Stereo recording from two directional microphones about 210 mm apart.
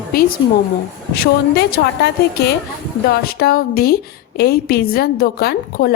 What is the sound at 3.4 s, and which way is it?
A woman's voice, 45° left (ahead or behind).